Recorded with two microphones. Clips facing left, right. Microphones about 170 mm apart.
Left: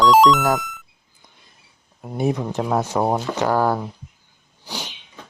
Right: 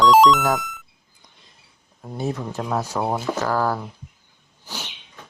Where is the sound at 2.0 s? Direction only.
15° left (ahead or behind).